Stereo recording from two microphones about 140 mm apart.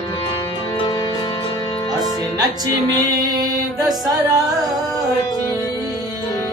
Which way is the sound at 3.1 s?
25° right (ahead or behind).